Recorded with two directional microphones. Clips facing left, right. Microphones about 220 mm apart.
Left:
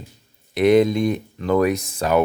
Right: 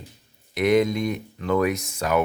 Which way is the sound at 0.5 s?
30° left (ahead or behind).